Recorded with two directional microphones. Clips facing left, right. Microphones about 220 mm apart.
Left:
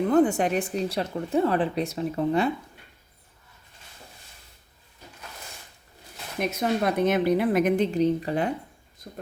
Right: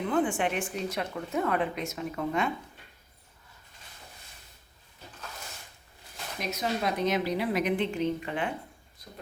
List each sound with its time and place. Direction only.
0.0 s speech: 40° left (ahead or behind)
6.4 s a woman's voice: 55° left (ahead or behind); by 8.5 s 40° left (ahead or behind)